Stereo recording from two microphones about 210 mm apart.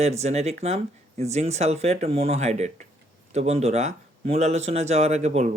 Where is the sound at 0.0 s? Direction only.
30° right (ahead or behind).